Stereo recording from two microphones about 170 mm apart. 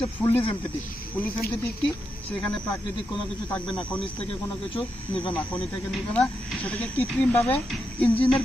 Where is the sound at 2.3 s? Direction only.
5° left (ahead or behind).